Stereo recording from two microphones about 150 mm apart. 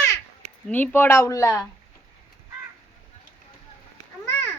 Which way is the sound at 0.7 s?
15° left (ahead or behind).